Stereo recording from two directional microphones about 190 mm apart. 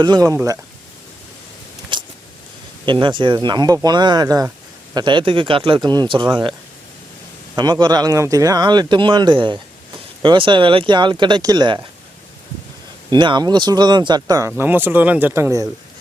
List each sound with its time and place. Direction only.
0.0 s speech: 20° right (ahead or behind)
1.9 s a sound: 25° right (ahead or behind)
2.8 s speech: 25° right (ahead or behind)
7.5 s speech: 20° right (ahead or behind)
13.1 s speech: 25° right (ahead or behind)